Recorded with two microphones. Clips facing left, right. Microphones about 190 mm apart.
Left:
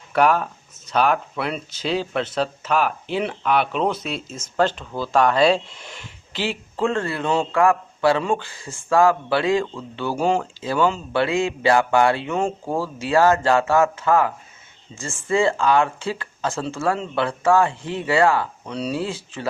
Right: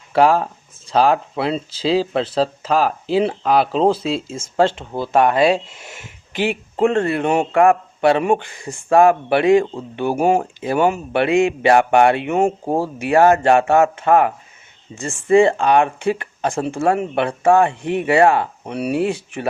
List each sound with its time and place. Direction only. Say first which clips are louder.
0.1 s speech: right 4 dB; 30° right (ahead or behind)
8.4 s speech: right 5 dB; 60° right (ahead or behind)
8.9 s speech: right 4 dB; 20° right (ahead or behind)
10.2 s speech: right 4 dB; 60° right (ahead or behind)
10.6 s speech: right 3 dB; 20° right (ahead or behind)
18.9 s speech: right 8 dB; 60° right (ahead or behind)